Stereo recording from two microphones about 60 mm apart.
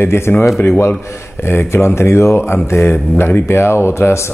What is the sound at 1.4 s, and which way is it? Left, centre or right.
Speech, left.